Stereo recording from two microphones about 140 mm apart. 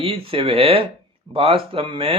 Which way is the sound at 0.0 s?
40° right (ahead or behind).